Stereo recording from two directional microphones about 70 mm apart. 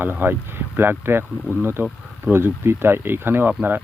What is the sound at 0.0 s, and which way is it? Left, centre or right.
Speech, right.